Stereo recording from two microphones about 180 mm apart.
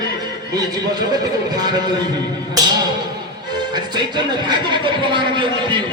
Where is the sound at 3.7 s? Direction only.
25° right (ahead or behind).